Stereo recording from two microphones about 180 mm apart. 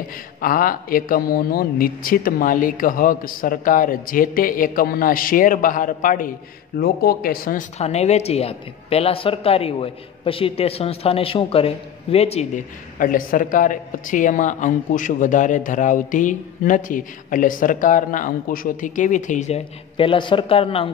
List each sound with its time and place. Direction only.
0.4 s speech: 50° left (ahead or behind)
7.8 s speech: 35° left (ahead or behind)